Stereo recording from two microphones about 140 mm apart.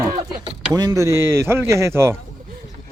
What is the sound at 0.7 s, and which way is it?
Speech, 25° right (ahead or behind).